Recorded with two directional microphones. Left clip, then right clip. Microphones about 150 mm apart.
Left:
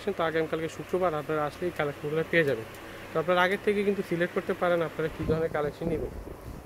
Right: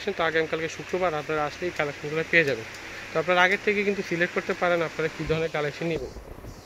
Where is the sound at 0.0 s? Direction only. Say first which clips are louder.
Right 3 dB; 5° left (ahead or behind); by 5.7 s 10° right (ahead or behind).